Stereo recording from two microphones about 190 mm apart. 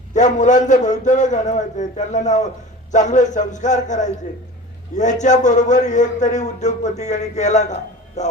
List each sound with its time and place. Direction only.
0.1 s a man's voice: 40° left (ahead or behind)